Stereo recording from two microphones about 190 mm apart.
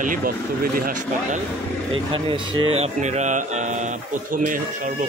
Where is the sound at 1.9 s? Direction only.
25° right (ahead or behind).